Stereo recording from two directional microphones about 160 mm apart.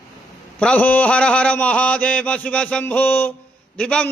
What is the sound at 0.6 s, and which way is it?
A man's voice, 10° left (ahead or behind).